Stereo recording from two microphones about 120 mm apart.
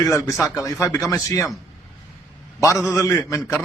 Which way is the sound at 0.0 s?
30° left (ahead or behind).